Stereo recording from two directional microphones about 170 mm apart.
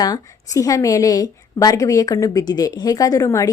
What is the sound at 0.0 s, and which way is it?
A woman's voice, 20° left (ahead or behind).